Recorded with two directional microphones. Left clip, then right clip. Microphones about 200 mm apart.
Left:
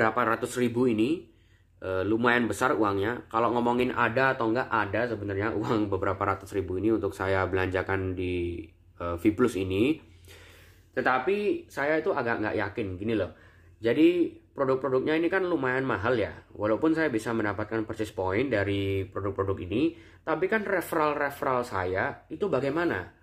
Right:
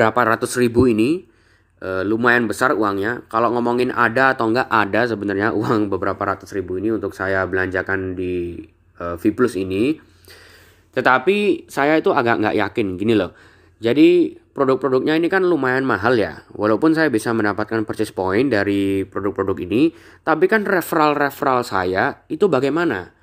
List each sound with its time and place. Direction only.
0.0 s a man's voice: 35° right (ahead or behind); by 9.9 s 20° right (ahead or behind)
11.0 s speech: 50° right (ahead or behind)
13.7 s a man's voice: 35° right (ahead or behind)